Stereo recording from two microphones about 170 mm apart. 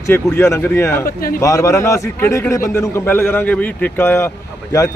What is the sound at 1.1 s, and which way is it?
Speech, 55° left (ahead or behind).